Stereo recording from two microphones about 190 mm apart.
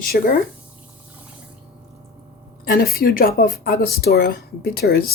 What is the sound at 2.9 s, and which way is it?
Speech, 50° left (ahead or behind).